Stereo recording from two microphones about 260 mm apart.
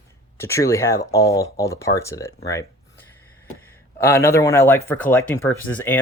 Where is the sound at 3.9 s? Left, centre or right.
Centre.